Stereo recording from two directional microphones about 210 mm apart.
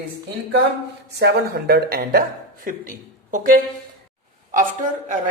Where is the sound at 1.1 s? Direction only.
50° right (ahead or behind).